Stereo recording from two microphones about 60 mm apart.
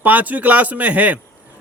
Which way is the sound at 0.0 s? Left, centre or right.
Right.